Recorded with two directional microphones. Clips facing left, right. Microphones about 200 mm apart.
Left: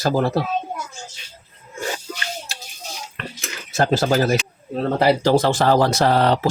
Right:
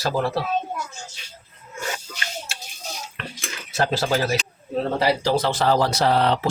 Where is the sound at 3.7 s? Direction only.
45° left (ahead or behind).